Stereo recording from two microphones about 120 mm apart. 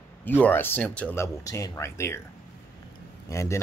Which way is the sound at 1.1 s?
25° left (ahead or behind).